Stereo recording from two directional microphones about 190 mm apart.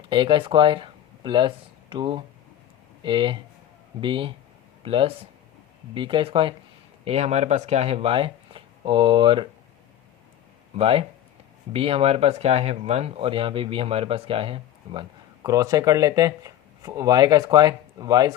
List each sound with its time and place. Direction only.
0.1 s speech: 25° right (ahead or behind)
10.8 s speech: 30° right (ahead or behind)
15.4 s speech: 15° right (ahead or behind)